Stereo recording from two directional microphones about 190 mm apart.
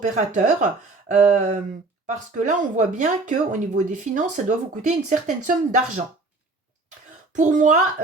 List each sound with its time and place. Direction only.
0.0 s speech: 40° right (ahead or behind)
7.3 s speech: 40° right (ahead or behind)